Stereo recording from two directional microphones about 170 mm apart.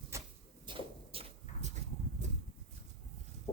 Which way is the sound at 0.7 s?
30° right (ahead or behind).